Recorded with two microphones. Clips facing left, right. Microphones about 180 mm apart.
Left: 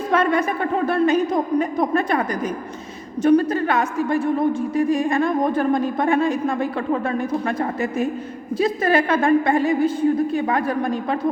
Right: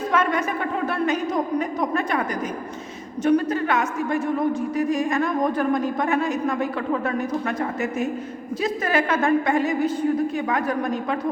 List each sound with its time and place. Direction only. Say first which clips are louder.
0.1 s a sound: left 4 dB; 35° left (ahead or behind)
0.9 s a woman's voice: left 7 dB; 30° left (ahead or behind)
3.2 s a woman's voice: left 3 dB; 35° left (ahead or behind)